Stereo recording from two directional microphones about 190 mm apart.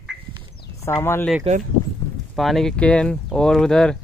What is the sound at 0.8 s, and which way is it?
Speech, 10° left (ahead or behind).